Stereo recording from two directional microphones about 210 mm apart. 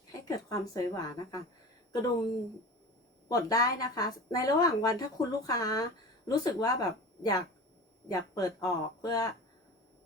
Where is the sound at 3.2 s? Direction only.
15° left (ahead or behind).